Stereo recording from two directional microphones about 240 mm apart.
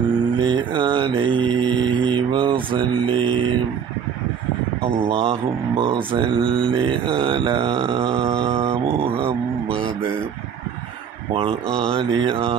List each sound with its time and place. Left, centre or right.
0.4 s mantra: centre
4.8 s mantra: right
11.3 s speech: right